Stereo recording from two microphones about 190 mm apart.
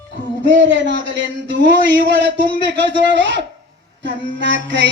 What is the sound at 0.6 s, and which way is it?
Speech, 70° right (ahead or behind).